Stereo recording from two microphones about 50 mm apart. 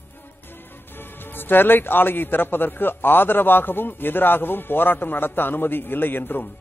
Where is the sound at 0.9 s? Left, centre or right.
Left.